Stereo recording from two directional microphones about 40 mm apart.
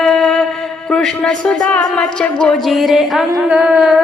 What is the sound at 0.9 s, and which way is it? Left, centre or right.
Speech, centre.